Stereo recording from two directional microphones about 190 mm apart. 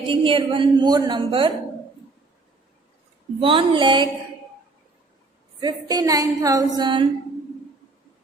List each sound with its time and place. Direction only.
0.1 s a woman's voice: 30° right (ahead or behind)
3.4 s a woman's voice: 25° right (ahead or behind)
5.5 s a woman's voice: 20° right (ahead or behind)